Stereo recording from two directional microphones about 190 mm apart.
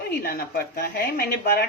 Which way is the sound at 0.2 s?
50° left (ahead or behind).